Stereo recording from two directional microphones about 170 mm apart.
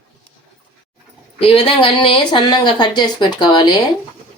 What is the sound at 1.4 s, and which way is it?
Speech, 35° left (ahead or behind).